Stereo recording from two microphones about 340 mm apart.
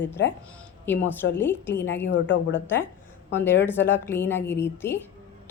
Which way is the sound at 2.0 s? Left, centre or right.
Left.